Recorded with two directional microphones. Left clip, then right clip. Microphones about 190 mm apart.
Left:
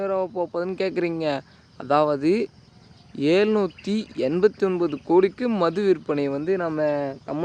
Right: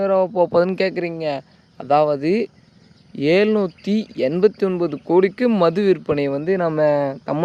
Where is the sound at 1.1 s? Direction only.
Centre (ahead or behind); by 6.6 s 25° right (ahead or behind).